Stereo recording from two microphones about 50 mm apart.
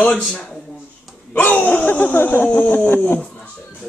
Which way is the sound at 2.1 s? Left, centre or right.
Left.